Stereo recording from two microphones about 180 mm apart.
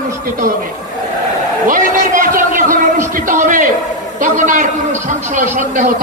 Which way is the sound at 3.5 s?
45° right (ahead or behind).